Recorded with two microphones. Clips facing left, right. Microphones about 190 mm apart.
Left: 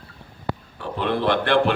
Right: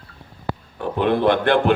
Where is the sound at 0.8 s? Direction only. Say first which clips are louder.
Right 5 dB; 55° right (ahead or behind).